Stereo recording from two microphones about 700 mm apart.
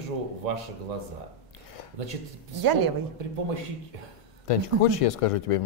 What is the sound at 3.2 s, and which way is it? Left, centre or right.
Speech, right.